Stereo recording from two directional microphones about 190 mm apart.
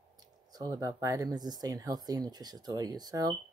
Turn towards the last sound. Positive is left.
turn(degrees=-20)  # may be behind; listen again after turning